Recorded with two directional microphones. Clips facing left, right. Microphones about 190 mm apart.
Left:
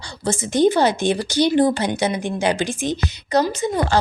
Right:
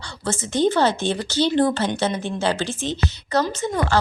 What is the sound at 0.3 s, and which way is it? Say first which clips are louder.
A woman's voice: left 3 dB; 15° left (ahead or behind).